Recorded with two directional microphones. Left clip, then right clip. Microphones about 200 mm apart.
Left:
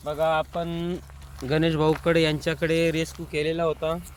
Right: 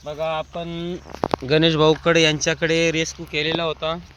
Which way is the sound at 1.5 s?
40° right (ahead or behind).